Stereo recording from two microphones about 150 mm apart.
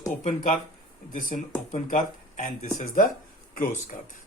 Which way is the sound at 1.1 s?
65° left (ahead or behind).